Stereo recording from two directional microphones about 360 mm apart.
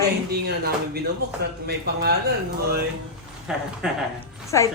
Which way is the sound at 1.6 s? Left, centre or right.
Right.